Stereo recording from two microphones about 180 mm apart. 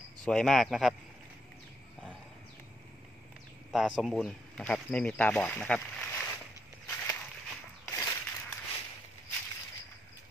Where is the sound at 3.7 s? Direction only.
Centre (ahead or behind).